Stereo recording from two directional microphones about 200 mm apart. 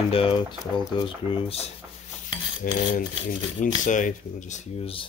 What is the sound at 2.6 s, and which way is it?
Speech, 40° left (ahead or behind).